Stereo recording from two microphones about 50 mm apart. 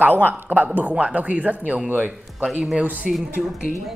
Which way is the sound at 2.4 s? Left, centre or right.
Centre.